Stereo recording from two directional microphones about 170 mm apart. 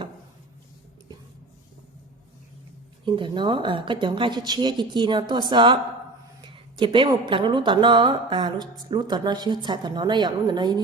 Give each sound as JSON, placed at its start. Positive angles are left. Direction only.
{"t": 3.0, "sound": "a woman's voice", "side_deg": -30}